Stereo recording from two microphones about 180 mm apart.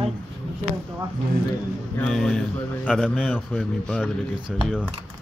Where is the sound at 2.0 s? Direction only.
5° left (ahead or behind).